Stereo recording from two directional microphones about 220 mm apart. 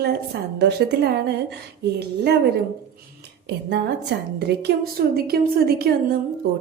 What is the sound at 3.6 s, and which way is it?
A woman's voice, 50° right (ahead or behind).